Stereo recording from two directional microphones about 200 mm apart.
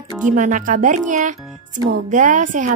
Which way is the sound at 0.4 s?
40° right (ahead or behind).